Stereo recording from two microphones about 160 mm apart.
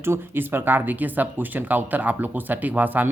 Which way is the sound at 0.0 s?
15° right (ahead or behind).